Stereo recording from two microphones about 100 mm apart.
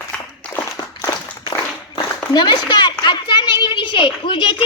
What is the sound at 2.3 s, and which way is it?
Speech, 45° left (ahead or behind).